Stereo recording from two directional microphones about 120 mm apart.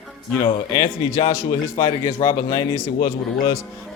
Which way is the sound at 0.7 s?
35° left (ahead or behind).